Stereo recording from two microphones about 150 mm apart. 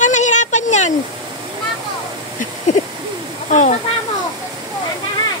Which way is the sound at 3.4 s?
55° left (ahead or behind).